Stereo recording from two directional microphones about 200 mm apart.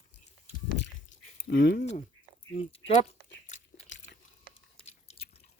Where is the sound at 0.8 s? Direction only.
65° left (ahead or behind).